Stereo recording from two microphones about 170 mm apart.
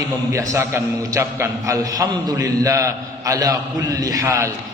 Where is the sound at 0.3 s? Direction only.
15° right (ahead or behind).